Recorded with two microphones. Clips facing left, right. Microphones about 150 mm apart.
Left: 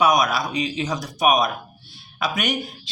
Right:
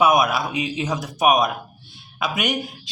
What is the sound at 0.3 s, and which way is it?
Speech, 20° right (ahead or behind).